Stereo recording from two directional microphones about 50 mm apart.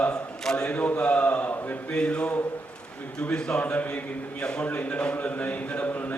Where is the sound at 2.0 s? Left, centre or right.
Left.